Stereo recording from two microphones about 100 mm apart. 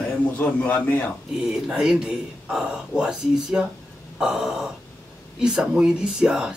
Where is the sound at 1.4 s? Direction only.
5° right (ahead or behind).